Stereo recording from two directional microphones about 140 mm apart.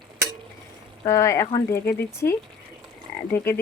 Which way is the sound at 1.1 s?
20° left (ahead or behind).